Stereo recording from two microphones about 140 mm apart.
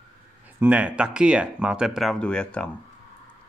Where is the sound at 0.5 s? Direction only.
10° right (ahead or behind); by 2.7 s 5° left (ahead or behind).